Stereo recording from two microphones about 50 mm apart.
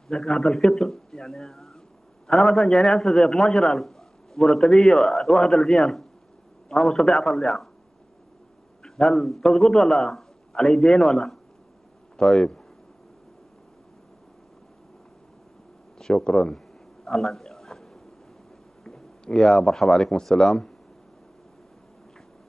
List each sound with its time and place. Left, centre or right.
0.1 s a man's voice: centre
8.8 s a man's voice: centre
16.0 s a sound: centre
18.9 s speech: centre